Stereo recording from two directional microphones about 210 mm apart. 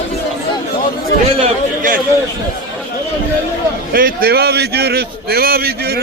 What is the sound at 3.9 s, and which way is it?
A man's voice, 45° right (ahead or behind).